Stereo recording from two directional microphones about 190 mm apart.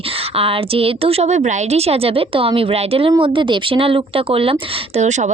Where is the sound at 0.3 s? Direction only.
30° right (ahead or behind).